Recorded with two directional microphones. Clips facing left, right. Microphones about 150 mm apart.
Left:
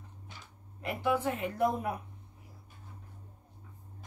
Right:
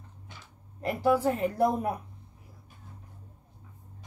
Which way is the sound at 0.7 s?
40° right (ahead or behind).